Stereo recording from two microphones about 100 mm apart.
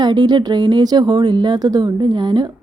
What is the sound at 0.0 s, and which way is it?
Speech, 45° right (ahead or behind).